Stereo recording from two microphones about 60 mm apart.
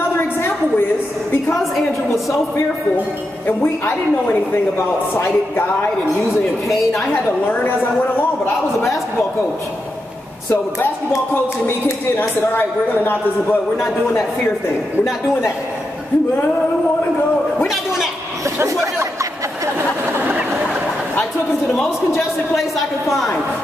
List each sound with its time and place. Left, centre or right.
3.4 s a woman's voice: left
7.4 s a woman's voice: left
11.6 s a woman's voice: left
20.2 s a sound: right